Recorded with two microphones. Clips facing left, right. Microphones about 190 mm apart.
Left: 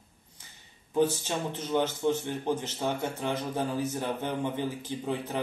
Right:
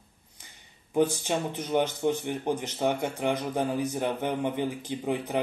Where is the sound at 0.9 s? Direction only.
15° right (ahead or behind).